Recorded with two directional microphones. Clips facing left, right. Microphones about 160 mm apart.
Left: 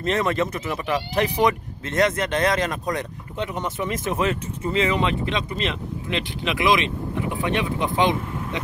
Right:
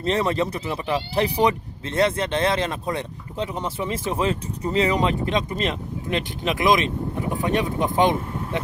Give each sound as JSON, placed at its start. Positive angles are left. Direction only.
{"t": 0.0, "sound": "speech", "side_deg": -30}